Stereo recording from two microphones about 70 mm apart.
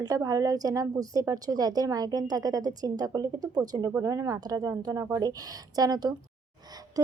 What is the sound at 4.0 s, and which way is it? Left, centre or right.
A woman's voice, right.